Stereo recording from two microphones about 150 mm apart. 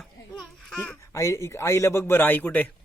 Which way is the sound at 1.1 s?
20° left (ahead or behind).